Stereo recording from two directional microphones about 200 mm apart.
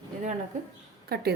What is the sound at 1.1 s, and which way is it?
Speech, 50° right (ahead or behind).